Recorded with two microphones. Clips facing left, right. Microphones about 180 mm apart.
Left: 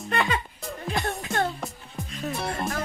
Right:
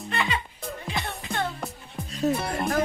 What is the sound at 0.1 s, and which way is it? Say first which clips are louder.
Speech: left 3 dB; 45° left (ahead or behind).